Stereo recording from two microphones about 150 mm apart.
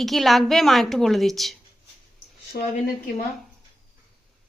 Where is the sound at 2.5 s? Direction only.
80° left.